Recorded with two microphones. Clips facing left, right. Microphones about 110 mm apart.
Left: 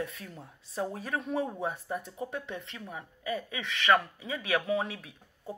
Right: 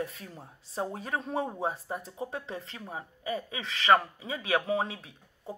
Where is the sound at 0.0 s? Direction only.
30° right (ahead or behind).